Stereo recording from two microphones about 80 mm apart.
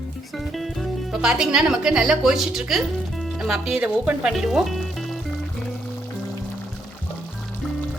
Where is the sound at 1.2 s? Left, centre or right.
Centre.